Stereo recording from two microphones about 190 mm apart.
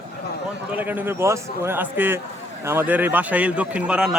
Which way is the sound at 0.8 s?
10° right (ahead or behind).